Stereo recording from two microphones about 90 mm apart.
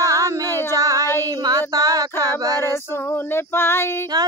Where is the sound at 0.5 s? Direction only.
30° left (ahead or behind).